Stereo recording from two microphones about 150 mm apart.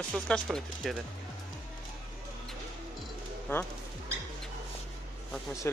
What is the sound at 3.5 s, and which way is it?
Speech, 15° left (ahead or behind).